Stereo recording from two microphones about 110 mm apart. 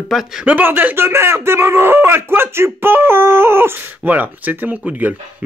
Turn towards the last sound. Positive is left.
turn(degrees=-15)  # may be behind; listen again after turning